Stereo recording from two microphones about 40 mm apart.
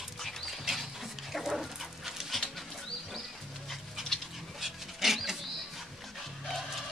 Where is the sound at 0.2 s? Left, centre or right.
Centre.